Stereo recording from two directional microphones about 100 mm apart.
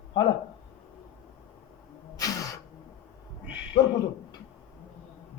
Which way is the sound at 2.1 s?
35° left (ahead or behind).